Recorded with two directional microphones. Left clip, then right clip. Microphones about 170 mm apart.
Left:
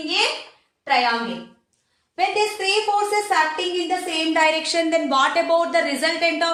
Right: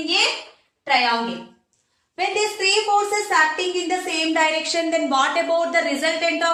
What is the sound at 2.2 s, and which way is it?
A woman's voice, 25° left (ahead or behind).